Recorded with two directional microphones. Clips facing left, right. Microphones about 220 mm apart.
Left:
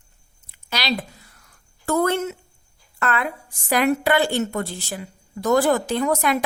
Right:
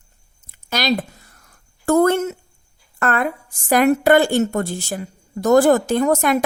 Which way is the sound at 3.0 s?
50° right (ahead or behind).